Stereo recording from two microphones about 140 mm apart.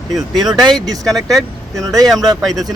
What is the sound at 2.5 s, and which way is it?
Speech, 25° right (ahead or behind).